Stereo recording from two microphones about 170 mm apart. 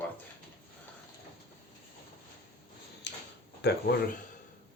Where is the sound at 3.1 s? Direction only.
90° left.